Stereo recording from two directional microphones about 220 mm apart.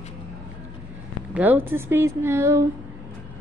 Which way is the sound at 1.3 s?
10° right (ahead or behind).